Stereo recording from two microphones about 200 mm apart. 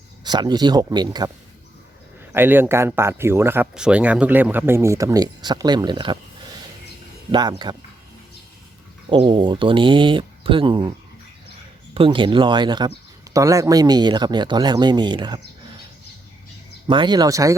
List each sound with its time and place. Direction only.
0.3 s speech: 20° right (ahead or behind)
2.3 s speech: 10° right (ahead or behind)
7.3 s speech: 20° right (ahead or behind)
9.0 s speech: 25° right (ahead or behind)
11.9 s speech: 25° right (ahead or behind)
16.8 s speech: 20° right (ahead or behind)